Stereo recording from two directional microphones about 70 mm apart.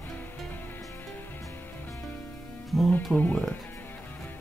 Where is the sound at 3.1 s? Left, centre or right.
Left.